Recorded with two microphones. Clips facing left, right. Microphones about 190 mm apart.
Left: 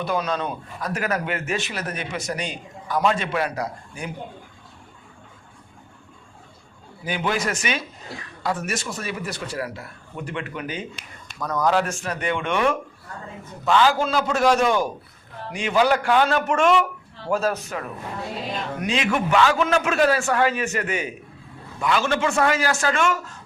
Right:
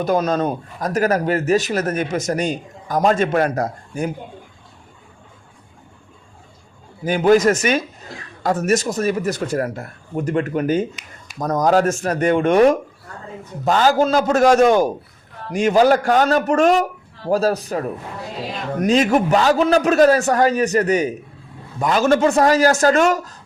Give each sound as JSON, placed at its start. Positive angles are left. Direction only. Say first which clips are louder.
{"t": 0.0, "sound": "speech", "louder": "right 7 dB", "side_deg": -45}
{"t": 7.0, "sound": "a man's voice", "louder": "right 11 dB", "side_deg": -45}